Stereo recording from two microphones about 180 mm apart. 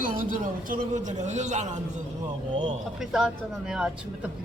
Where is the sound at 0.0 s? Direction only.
50° right (ahead or behind).